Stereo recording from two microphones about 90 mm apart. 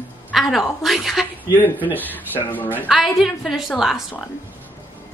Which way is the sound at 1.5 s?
20° left (ahead or behind).